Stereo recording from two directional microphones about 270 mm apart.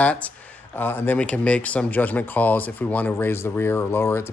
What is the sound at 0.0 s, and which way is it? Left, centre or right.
Speech, centre.